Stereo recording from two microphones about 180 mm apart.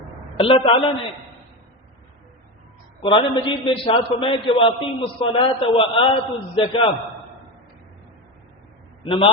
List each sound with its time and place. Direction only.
0.3 s a woman's voice: 30° left (ahead or behind)
3.0 s a man's voice: 25° left (ahead or behind)
9.0 s a man's voice: 30° left (ahead or behind)